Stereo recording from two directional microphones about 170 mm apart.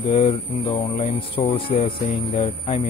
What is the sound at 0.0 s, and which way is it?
Speech, 30° left (ahead or behind).